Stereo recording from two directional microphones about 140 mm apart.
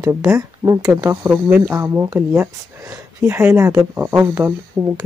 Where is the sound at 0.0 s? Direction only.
20° right (ahead or behind).